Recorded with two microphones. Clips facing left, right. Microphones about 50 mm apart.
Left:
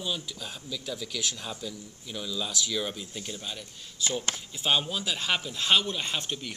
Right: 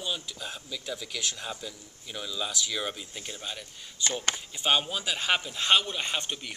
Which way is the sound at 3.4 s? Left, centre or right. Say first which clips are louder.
Even; centre.